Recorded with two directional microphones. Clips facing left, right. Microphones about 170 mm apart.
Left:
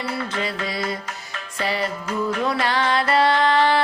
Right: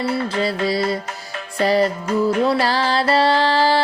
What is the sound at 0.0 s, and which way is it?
Music, 35° right (ahead or behind).